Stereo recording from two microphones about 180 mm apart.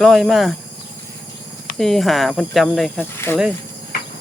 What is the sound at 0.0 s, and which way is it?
Speech, centre (ahead or behind).